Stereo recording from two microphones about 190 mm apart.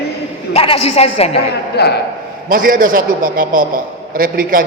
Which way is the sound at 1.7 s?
60° left (ahead or behind).